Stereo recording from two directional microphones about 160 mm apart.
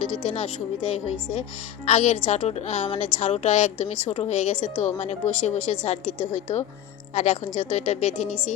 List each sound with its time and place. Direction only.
0.0 s a woman's voice: 45° left (ahead or behind)